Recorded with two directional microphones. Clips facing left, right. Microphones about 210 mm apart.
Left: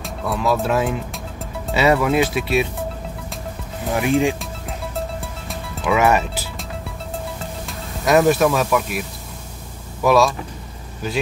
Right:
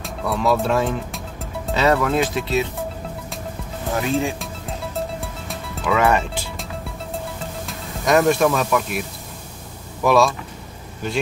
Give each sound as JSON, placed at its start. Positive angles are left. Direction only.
{"t": 0.0, "sound": "speech", "side_deg": 0}
{"t": 3.9, "sound": "speech", "side_deg": 15}
{"t": 5.5, "sound": "music", "side_deg": 10}
{"t": 7.6, "sound": "speech", "side_deg": 0}
{"t": 10.0, "sound": "speech", "side_deg": 0}